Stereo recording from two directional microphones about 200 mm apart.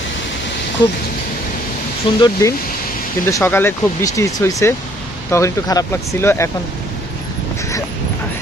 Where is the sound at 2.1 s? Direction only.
25° left (ahead or behind).